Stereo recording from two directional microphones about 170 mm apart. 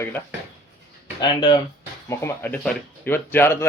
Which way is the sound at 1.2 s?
25° left (ahead or behind).